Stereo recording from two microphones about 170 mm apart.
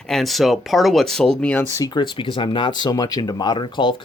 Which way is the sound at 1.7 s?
25° left (ahead or behind).